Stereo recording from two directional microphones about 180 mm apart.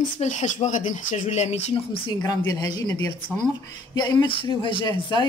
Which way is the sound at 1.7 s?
25° left (ahead or behind).